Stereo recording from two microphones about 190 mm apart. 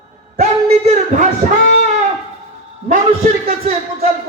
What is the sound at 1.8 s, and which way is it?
Shofar, 35° right (ahead or behind).